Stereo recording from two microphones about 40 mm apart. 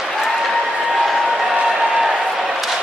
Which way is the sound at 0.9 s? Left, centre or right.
Centre.